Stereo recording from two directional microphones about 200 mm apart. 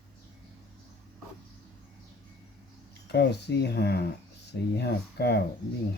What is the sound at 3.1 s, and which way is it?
Speech, 55° left (ahead or behind).